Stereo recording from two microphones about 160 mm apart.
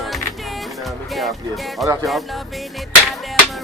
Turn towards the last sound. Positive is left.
turn(degrees=0)  # may be behind; listen again after turning